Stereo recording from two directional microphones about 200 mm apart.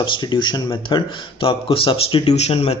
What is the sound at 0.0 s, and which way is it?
A man's voice, 20° left (ahead or behind).